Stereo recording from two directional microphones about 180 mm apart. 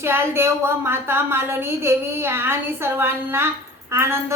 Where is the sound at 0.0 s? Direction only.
15° right (ahead or behind).